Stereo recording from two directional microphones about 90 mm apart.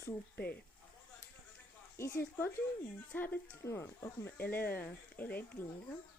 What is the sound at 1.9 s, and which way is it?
Speech, 30° left (ahead or behind).